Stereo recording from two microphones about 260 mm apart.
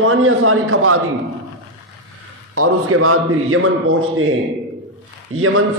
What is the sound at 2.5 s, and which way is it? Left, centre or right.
A man's voice, right.